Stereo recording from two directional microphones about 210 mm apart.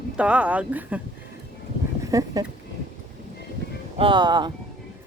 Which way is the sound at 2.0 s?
15° right (ahead or behind).